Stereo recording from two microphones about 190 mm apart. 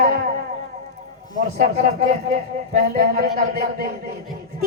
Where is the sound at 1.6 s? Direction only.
50° right (ahead or behind).